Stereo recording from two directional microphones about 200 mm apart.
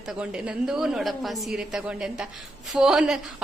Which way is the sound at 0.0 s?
5° right (ahead or behind).